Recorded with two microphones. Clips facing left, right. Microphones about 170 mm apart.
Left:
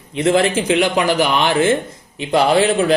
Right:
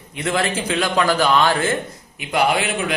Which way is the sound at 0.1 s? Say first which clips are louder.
Left 7 dB; 25° left (ahead or behind).